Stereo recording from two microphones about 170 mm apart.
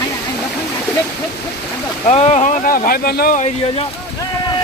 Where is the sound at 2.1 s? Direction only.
40° left (ahead or behind); by 3.4 s 55° left (ahead or behind).